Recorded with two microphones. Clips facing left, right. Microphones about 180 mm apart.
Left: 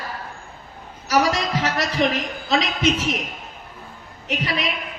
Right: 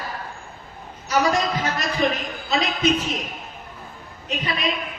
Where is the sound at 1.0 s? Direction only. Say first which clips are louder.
Even; 75° left (ahead or behind).